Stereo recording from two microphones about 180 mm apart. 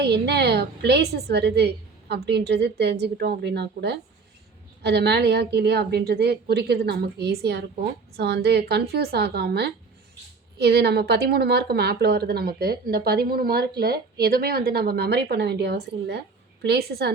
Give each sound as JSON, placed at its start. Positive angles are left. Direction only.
{"t": 0.0, "sound": "a woman's voice", "side_deg": -65}